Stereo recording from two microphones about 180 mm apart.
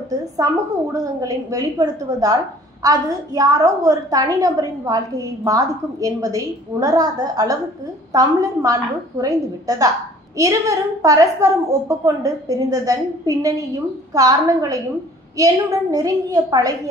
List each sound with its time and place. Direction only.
0.9 s a woman's voice: 20° right (ahead or behind)